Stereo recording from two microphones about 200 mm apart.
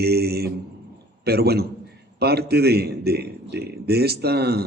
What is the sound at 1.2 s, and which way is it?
A man's voice, 55° right (ahead or behind).